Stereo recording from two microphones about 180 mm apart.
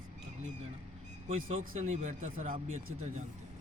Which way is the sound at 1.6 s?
45° right (ahead or behind).